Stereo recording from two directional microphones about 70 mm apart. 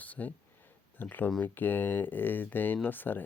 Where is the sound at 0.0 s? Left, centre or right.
Left.